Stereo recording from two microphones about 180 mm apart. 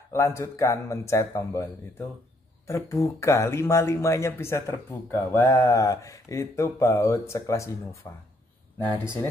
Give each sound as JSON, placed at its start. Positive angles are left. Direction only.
{"t": 0.1, "sound": "speech", "side_deg": 15}